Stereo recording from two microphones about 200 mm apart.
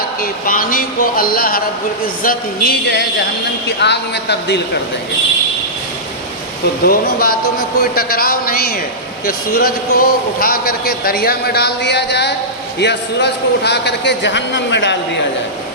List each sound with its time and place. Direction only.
0.2 s a man's voice: 45° left (ahead or behind)
3.8 s a man's voice: 60° left (ahead or behind)
6.8 s a man's voice: 50° left (ahead or behind)